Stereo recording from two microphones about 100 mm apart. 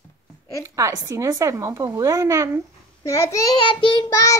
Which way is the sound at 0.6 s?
30° right (ahead or behind).